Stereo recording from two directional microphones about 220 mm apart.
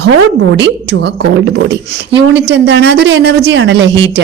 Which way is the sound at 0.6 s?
55° right (ahead or behind).